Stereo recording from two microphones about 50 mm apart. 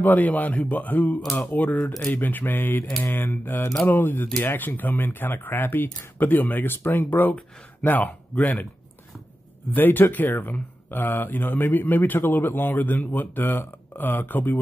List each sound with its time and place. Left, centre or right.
0.0 s a man's voice: left
9.8 s a man's voice: left